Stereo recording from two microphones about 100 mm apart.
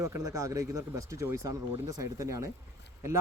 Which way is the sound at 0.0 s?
30° right (ahead or behind).